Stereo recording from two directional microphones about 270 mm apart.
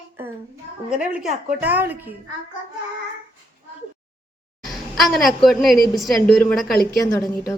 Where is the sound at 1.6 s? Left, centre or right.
Centre.